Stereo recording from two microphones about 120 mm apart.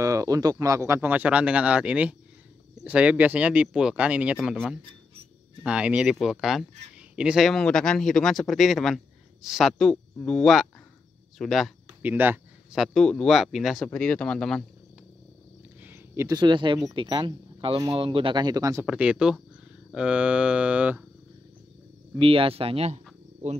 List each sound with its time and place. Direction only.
0.0 s speech: 30° right (ahead or behind); by 11.7 s centre (ahead or behind)
12.0 s speech: 15° right (ahead or behind)
12.7 s speech: centre (ahead or behind)
15.8 s a sound: 20° right (ahead or behind)
16.3 s speech: 40° right (ahead or behind)
18.9 s speech: 10° right (ahead or behind)
22.2 s speech: 50° right (ahead or behind)